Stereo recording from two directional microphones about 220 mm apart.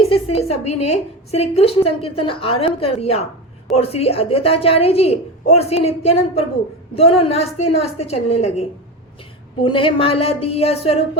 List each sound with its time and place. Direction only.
0.0 s a woman's voice: 25° left (ahead or behind)
9.6 s a woman's voice: 25° left (ahead or behind)